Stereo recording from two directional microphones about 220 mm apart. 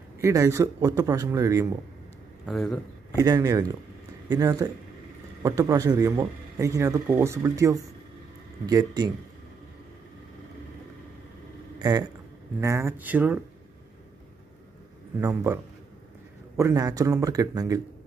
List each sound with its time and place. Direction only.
0.2 s speech: 15° right (ahead or behind)
2.4 s a man's voice: centre (ahead or behind)
3.2 s speech: 15° right (ahead or behind)
11.8 s speech: 20° right (ahead or behind)
15.1 s speech: 15° right (ahead or behind)